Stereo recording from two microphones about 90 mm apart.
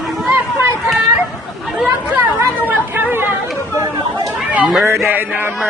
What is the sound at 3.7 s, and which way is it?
Chatter, 35° right (ahead or behind).